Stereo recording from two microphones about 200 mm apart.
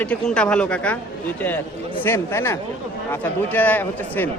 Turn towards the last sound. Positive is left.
turn(degrees=10)  # may be behind; listen again after turning